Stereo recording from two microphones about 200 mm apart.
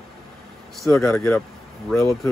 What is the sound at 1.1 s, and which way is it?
Speech, 10° left (ahead or behind).